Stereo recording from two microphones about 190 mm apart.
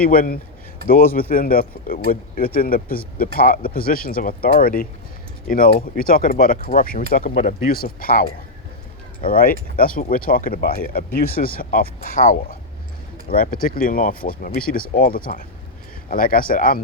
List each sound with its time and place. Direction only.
0.0 s speech: 50° left (ahead or behind)